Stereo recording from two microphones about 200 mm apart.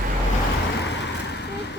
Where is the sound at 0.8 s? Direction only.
60° left (ahead or behind).